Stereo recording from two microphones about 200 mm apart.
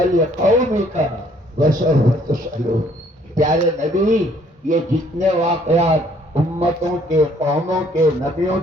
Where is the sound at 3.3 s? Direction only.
40° right (ahead or behind).